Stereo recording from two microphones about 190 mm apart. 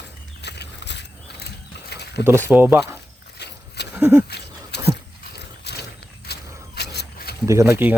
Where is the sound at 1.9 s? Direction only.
60° left (ahead or behind).